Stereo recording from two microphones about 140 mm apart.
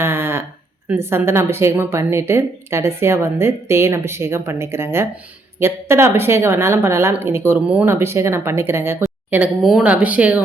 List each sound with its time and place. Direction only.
0.0 s a sound: 15° right (ahead or behind)
0.9 s a woman's voice: 15° right (ahead or behind)
9.6 s a woman's voice: 5° right (ahead or behind)